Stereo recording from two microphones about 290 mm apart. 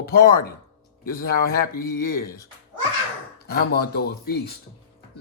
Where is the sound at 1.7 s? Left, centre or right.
Left.